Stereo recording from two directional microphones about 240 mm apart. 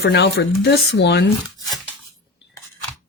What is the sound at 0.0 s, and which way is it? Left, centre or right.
Speech, left.